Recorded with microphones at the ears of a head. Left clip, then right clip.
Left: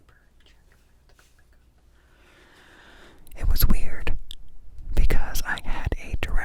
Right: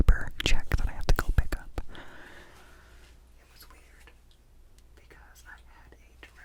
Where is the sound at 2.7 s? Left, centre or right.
Left.